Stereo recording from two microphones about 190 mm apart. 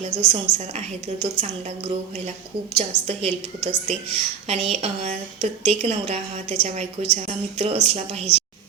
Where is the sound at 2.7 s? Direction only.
35° right (ahead or behind).